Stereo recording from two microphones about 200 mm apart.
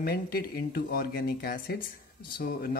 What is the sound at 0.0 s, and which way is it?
Speech, 50° left (ahead or behind).